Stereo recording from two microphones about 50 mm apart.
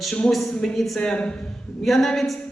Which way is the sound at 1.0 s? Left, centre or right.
Centre.